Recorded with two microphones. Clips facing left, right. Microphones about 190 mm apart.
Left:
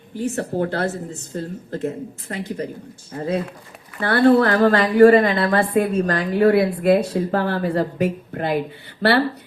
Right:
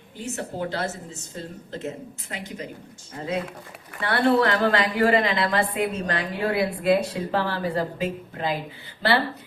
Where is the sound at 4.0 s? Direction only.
40° left (ahead or behind); by 8.6 s 60° left (ahead or behind).